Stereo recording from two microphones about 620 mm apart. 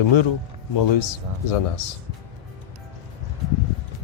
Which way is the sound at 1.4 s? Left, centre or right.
Left.